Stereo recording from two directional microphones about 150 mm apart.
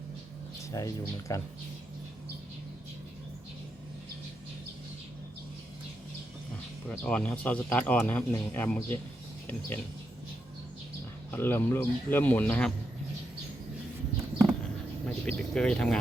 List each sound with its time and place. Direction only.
0.7 s speech: 20° left (ahead or behind)
6.8 s speech: 10° left (ahead or behind)
11.3 s speech: 15° left (ahead or behind)
15.0 s speech: 5° left (ahead or behind)